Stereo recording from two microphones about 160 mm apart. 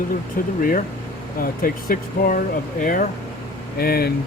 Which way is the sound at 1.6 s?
65° left (ahead or behind).